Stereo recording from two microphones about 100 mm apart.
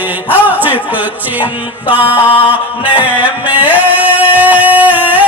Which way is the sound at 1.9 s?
15° right (ahead or behind).